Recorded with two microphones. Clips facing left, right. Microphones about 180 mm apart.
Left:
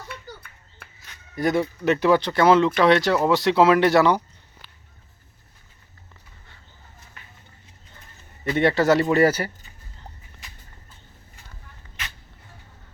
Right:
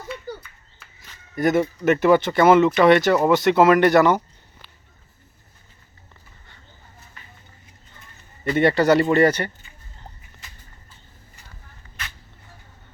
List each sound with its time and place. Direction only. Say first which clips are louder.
0.8 s a sound: left 3 dB; 60° left (ahead or behind)
1.4 s speech: right 3 dB; centre (ahead or behind)
8.4 s speech: right 2 dB; centre (ahead or behind)